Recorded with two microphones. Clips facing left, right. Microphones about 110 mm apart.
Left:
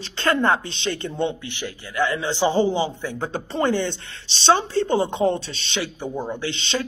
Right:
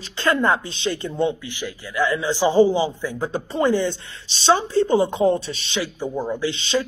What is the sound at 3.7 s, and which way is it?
Speech, 65° left (ahead or behind).